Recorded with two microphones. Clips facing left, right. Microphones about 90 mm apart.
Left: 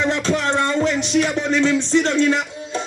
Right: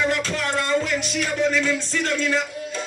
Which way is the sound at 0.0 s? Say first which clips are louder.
Left 4 dB; 25° left (ahead or behind).